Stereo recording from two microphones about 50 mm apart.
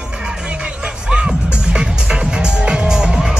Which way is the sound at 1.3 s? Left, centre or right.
Centre.